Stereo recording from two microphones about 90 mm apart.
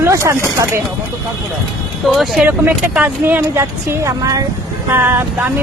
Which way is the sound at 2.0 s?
Centre (ahead or behind).